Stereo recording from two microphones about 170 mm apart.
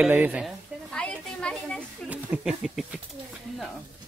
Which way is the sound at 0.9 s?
5° left (ahead or behind).